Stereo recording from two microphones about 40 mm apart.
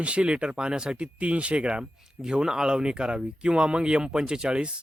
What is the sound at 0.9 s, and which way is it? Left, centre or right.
Speech, right.